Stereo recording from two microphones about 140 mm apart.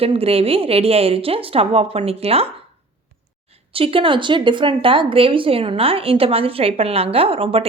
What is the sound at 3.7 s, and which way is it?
Speech, 40° right (ahead or behind).